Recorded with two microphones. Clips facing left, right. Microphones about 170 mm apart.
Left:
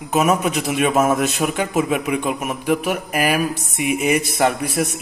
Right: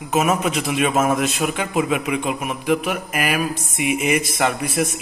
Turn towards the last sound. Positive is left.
turn(degrees=40)  # may be behind; listen again after turning